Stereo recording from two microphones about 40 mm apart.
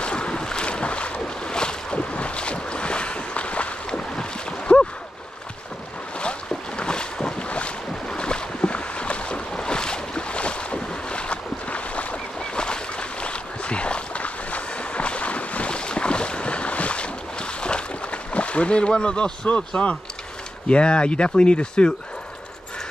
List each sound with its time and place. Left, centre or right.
0.0 s boat: left
4.1 s a sound: left
6.1 s boat: left
12.4 s boat: left
20.6 s speech: left